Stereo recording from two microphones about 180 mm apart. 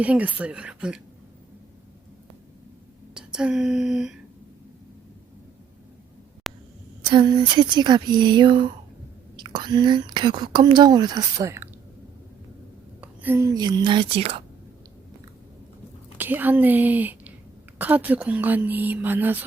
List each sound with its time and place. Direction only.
0.0 s speech: 10° right (ahead or behind)
3.2 s a sound: 5° right (ahead or behind)
6.5 s a sound: centre (ahead or behind)
7.1 s speech: 25° right (ahead or behind)
13.0 s speech: 10° right (ahead or behind); by 14.4 s 30° right (ahead or behind)
16.1 s a woman's voice: 10° right (ahead or behind)